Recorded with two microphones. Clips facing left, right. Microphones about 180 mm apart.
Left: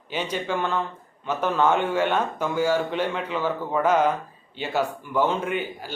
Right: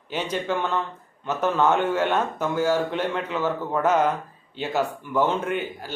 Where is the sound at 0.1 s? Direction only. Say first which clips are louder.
Right 1 dB; 10° left (ahead or behind).